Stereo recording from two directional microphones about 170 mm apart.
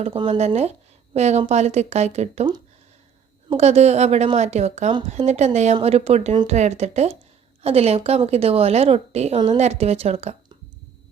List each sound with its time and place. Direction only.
0.0 s a woman's voice: 35° right (ahead or behind)
3.5 s a woman's voice: 40° right (ahead or behind)